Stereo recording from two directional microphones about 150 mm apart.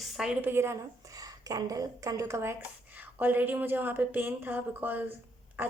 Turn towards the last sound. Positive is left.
turn(degrees=-15)  # may be behind; listen again after turning